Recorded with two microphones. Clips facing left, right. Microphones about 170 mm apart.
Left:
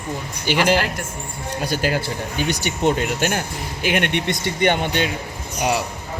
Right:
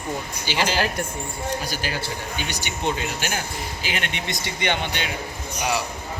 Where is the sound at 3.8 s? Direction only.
60° left (ahead or behind).